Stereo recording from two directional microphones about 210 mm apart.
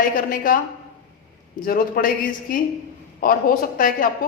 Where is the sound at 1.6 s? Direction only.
45° left (ahead or behind).